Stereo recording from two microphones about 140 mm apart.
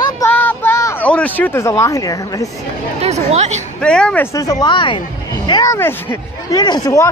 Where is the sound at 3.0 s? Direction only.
50° right (ahead or behind).